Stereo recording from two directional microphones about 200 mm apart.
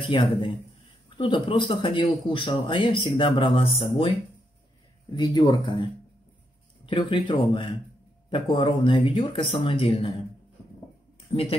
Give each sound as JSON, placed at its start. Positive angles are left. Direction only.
{"t": 1.1, "sound": "speech", "side_deg": 25}
{"t": 5.1, "sound": "speech", "side_deg": 20}
{"t": 6.9, "sound": "speech", "side_deg": 25}
{"t": 11.1, "sound": "a sound", "side_deg": 30}